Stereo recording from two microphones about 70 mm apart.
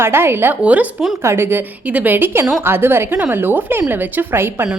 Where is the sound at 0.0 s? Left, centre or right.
Right.